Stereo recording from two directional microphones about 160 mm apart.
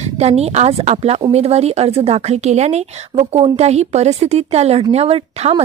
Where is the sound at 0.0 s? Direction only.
40° right (ahead or behind).